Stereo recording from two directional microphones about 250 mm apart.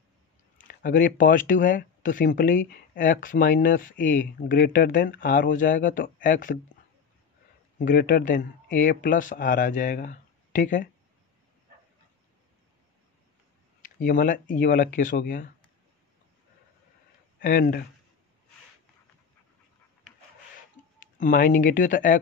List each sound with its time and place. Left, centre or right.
0.7 s speech: left
7.8 s speech: left
13.8 s speech: left
17.4 s speech: left
21.0 s speech: left